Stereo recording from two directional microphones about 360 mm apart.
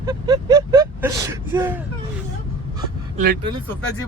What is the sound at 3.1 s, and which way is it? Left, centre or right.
Speech, right.